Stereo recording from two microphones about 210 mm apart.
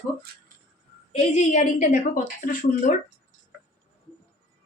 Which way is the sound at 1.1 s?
30° left (ahead or behind).